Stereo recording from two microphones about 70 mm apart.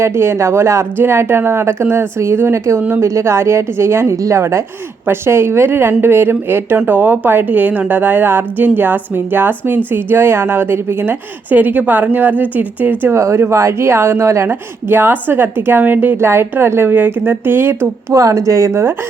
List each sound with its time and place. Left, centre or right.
0.0 s a woman's voice: right
13.1 s a woman's voice: right
14.5 s speech: right
16.1 s a woman's voice: right
18.1 s speech: right